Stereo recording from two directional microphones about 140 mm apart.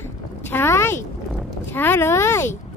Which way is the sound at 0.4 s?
15° left (ahead or behind).